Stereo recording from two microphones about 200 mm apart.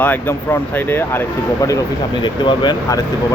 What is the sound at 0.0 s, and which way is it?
Speech, 10° left (ahead or behind).